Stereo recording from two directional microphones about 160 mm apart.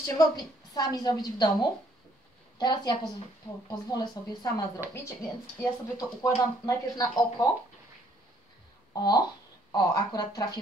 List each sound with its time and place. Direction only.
0.0 s speech: 25° left (ahead or behind)
5.6 s speech: 20° left (ahead or behind)
8.9 s speech: 25° left (ahead or behind)